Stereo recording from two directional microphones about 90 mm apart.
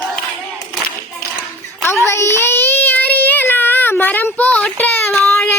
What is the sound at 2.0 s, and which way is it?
Child singing, 30° left (ahead or behind).